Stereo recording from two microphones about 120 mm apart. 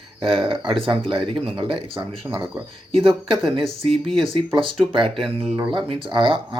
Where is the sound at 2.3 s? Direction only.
20° right (ahead or behind).